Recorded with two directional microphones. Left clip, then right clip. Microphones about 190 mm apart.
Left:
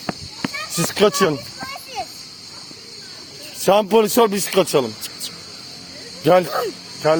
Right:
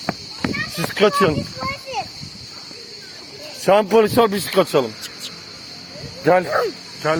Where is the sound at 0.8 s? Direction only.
60° left (ahead or behind).